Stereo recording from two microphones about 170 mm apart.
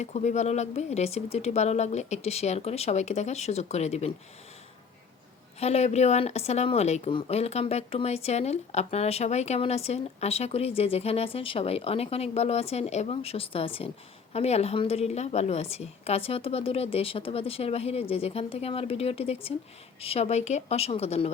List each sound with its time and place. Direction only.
0.0 s a woman's voice: 45° left (ahead or behind)
5.5 s a woman's voice: 40° left (ahead or behind)